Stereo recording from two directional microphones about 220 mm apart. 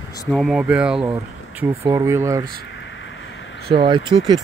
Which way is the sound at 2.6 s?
55° left (ahead or behind).